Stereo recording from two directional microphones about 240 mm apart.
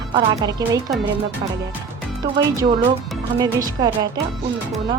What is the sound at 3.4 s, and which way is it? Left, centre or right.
Speech, centre.